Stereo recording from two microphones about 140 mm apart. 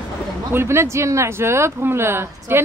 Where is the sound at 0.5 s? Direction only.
20° right (ahead or behind).